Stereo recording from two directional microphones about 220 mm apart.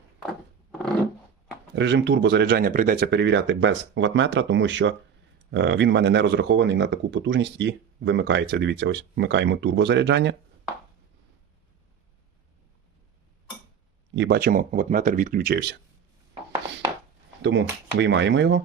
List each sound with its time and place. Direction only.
1.7 s speech: 55° right (ahead or behind)
14.2 s speech: 45° right (ahead or behind)
17.4 s speech: 55° right (ahead or behind)